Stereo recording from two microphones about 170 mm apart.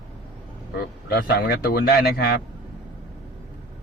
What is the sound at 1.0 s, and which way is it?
A man's voice, 65° left (ahead or behind).